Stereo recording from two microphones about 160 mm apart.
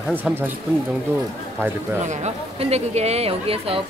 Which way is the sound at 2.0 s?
45° right (ahead or behind).